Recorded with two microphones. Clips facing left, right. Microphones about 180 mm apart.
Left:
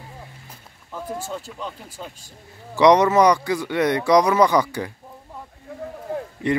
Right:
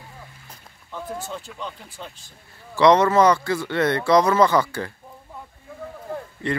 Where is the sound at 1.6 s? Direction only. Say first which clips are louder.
Left 2 dB; 5° left (ahead or behind).